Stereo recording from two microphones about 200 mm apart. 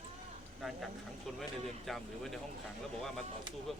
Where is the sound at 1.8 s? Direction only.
Centre (ahead or behind).